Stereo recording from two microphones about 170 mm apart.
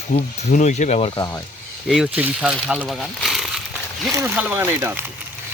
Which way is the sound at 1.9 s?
5° right (ahead or behind).